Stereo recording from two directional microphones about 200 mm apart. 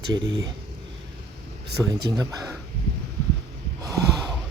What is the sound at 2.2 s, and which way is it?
Speech, 20° right (ahead or behind).